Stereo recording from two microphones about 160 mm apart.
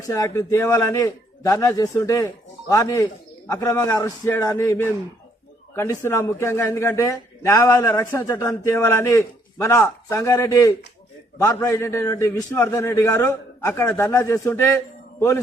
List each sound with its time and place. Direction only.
0.0 s a man's voice: 20° left (ahead or behind)